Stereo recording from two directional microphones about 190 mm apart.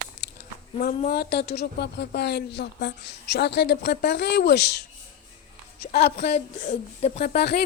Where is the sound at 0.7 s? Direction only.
45° left (ahead or behind).